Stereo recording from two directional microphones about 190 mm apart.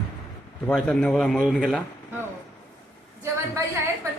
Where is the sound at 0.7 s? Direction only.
5° left (ahead or behind).